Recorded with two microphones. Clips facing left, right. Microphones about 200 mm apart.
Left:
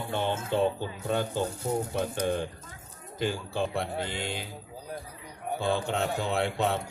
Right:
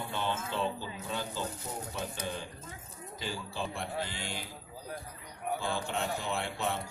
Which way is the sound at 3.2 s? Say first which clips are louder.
Left 8 dB; 55° left (ahead or behind).